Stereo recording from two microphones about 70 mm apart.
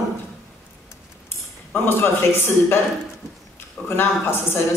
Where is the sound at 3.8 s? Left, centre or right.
Left.